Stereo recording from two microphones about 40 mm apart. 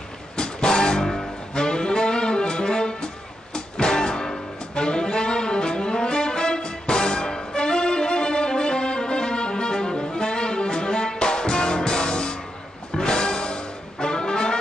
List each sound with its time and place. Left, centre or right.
0.4 s music: left
1.5 s saxophone: centre
12.9 s music: centre